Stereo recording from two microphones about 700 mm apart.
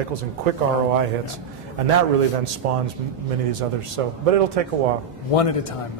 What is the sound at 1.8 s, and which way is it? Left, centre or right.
A man's voice, right.